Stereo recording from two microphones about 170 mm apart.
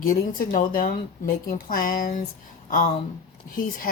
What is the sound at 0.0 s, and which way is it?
A woman's voice, 55° left (ahead or behind).